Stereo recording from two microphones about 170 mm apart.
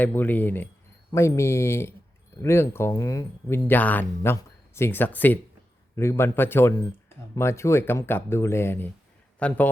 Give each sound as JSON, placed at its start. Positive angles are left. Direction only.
{"t": 0.0, "sound": "speech", "side_deg": 10}